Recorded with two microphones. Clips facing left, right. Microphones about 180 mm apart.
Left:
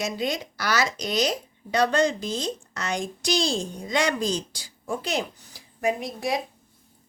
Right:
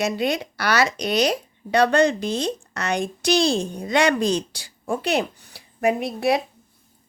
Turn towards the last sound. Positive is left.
turn(degrees=-65)  # may be behind; listen again after turning